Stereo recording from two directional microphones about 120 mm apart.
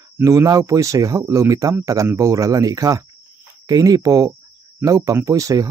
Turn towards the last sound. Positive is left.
turn(degrees=-30)  # may be behind; listen again after turning